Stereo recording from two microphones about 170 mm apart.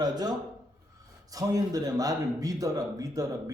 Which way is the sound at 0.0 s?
25° right (ahead or behind).